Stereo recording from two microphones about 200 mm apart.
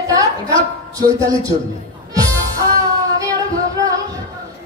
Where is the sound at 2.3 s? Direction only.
15° right (ahead or behind).